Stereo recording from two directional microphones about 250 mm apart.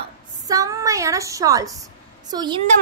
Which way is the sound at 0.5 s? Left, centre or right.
Centre.